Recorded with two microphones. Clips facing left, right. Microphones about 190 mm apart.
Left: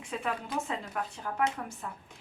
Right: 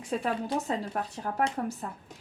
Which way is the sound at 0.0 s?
40° right (ahead or behind).